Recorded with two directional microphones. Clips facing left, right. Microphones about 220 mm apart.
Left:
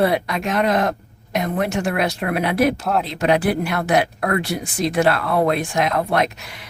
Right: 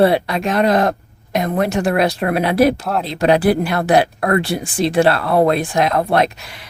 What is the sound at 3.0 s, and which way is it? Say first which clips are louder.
Speech: right 6 dB; 35° right (ahead or behind).